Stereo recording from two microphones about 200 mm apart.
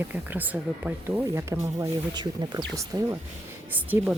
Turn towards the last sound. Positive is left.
turn(degrees=-5)  # may be behind; listen again after turning